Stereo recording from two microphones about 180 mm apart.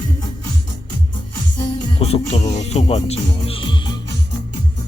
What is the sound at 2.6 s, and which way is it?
Music, 35° left (ahead or behind).